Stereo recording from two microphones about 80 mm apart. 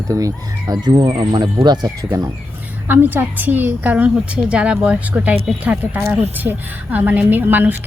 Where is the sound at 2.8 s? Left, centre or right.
Right.